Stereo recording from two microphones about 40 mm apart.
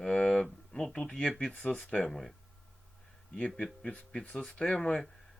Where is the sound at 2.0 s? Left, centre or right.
Centre.